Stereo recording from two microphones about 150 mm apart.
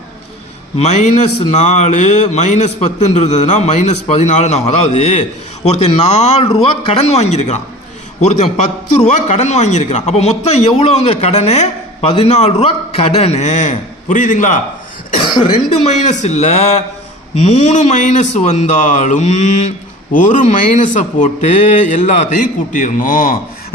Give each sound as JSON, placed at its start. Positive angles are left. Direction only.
{"t": 0.8, "sound": "a man's voice", "side_deg": 50}
{"t": 15.2, "sound": "a man's voice", "side_deg": 30}